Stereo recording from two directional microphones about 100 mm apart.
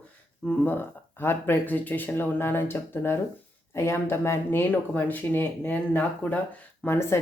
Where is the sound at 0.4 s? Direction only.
20° left (ahead or behind).